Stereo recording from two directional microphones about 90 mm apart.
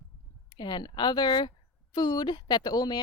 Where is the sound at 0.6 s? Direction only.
55° left (ahead or behind).